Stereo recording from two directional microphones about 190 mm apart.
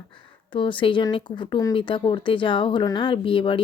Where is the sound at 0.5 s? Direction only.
25° left (ahead or behind).